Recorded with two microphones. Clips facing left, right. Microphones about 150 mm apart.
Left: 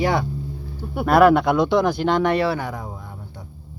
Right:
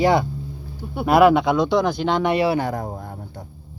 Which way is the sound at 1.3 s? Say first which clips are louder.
Left 1 dB; 5° left (ahead or behind).